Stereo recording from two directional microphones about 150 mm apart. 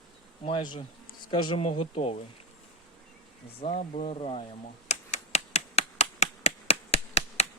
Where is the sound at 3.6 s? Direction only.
50° left (ahead or behind).